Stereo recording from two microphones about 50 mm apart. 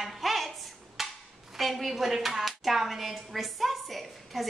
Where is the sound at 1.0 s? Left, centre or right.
Centre.